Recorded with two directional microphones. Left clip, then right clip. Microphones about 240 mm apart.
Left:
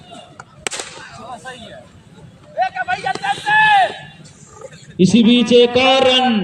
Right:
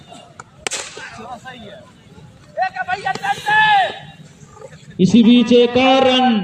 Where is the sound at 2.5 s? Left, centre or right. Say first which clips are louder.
Left 1 dB; left.